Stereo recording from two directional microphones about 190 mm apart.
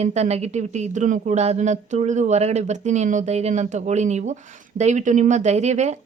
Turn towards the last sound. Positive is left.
turn(degrees=-35)  # may be behind; listen again after turning